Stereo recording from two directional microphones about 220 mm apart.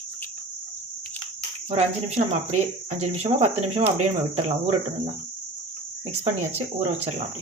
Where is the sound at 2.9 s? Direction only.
30° right (ahead or behind).